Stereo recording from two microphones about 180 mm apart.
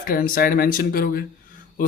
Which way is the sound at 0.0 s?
55° left (ahead or behind).